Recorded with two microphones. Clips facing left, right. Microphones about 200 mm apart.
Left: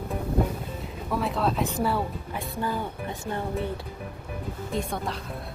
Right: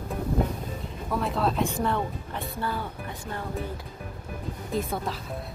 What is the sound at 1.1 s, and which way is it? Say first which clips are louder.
Speech: even; centre (ahead or behind).